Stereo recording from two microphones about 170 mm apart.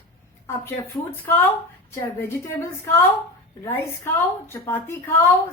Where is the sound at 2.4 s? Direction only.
15° left (ahead or behind).